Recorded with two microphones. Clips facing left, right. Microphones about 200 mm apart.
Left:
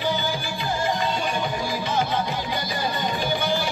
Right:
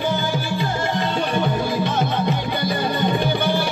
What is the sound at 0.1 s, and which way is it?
Music, 60° right (ahead or behind).